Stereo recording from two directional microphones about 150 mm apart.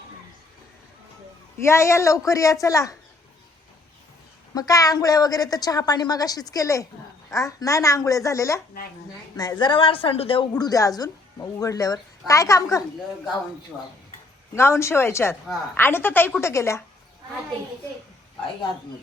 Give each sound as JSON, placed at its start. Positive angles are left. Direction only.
{"t": 1.6, "sound": "a woman's voice", "side_deg": 20}
{"t": 4.5, "sound": "a woman's voice", "side_deg": 25}
{"t": 10.6, "sound": "a woman's voice", "side_deg": 25}
{"t": 14.5, "sound": "a woman's voice", "side_deg": 20}